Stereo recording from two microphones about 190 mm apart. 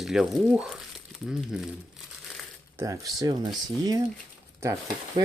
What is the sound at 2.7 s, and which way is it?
Speech, 15° right (ahead or behind).